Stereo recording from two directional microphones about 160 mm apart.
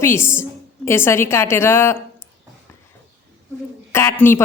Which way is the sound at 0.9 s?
15° left (ahead or behind).